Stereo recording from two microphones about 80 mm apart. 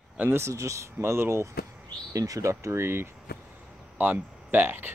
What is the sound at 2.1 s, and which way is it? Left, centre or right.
Speech, right.